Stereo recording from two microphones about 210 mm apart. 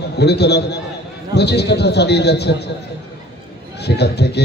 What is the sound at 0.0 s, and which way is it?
A man's voice, 50° left (ahead or behind).